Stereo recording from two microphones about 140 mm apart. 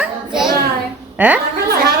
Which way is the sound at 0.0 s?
5° right (ahead or behind).